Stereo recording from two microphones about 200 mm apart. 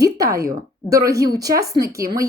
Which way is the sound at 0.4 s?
15° right (ahead or behind).